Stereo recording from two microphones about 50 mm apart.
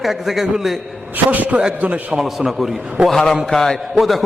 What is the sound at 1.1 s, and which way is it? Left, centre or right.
A man's voice, right.